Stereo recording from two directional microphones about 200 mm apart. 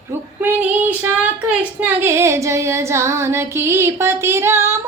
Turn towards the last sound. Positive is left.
turn(degrees=-15)  # may be behind; listen again after turning